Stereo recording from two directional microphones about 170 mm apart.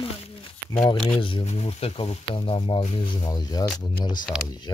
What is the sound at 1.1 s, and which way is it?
Speech, 30° left (ahead or behind).